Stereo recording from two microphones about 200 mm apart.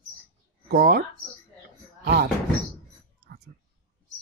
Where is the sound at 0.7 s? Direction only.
50° right (ahead or behind).